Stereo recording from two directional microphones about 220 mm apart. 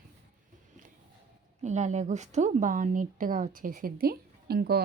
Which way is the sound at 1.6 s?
30° right (ahead or behind).